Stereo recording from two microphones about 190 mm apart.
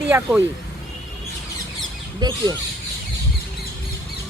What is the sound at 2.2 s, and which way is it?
Speech, 20° right (ahead or behind).